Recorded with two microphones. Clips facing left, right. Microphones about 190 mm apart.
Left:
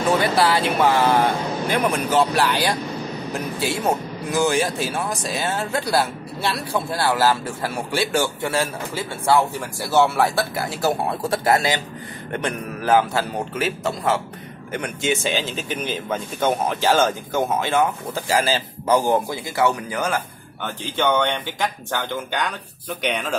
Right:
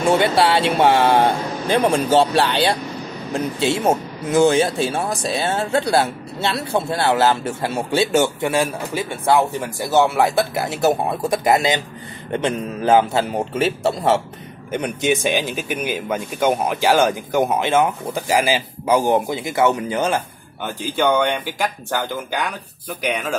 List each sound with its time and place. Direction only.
0.0 s speech: 25° right (ahead or behind)
14.7 s speech: 20° right (ahead or behind)
20.6 s speech: 10° right (ahead or behind)